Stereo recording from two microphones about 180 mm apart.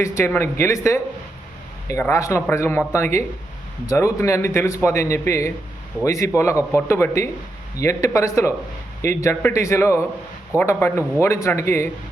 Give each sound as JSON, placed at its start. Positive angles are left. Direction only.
{"t": 0.0, "sound": "a man's voice", "side_deg": 15}
{"t": 2.0, "sound": "a man's voice", "side_deg": 15}